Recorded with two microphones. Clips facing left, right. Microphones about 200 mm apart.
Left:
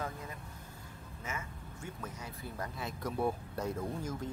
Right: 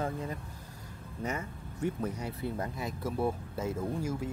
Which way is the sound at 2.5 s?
25° right (ahead or behind).